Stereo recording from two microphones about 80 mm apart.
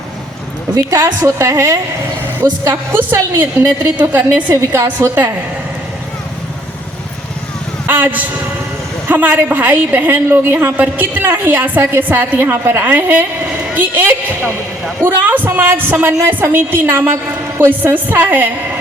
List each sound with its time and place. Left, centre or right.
0.7 s a woman's voice: right
2.9 s a woman's voice: right
4.8 s a woman's voice: right
7.9 s a sound: right
9.0 s a woman's voice: right